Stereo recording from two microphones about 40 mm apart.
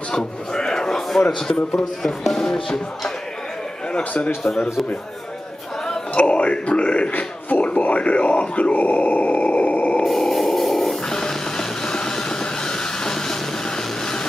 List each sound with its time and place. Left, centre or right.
0.1 s a sound: centre
1.5 s music: centre
4.4 s music: centre
6.1 s a man's voice: left
7.1 s a man's voice: left
7.6 s speech: left
10.0 s a sound: centre
11.1 s music: centre